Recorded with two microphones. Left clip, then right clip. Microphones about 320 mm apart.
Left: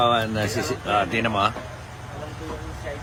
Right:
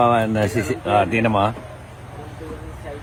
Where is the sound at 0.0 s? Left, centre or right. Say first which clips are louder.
Right 4 dB; centre.